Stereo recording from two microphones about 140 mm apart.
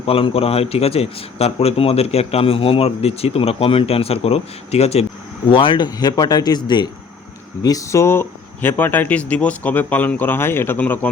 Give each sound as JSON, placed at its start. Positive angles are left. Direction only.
{"t": 0.0, "sound": "a man's voice", "side_deg": 45}
{"t": 5.5, "sound": "speech", "side_deg": 35}